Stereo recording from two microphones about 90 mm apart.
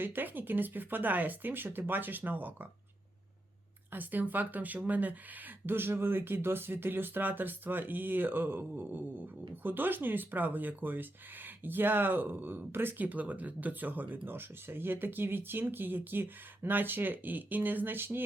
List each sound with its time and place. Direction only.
0.0 s speech: 20° right (ahead or behind)
3.9 s speech: 20° right (ahead or behind)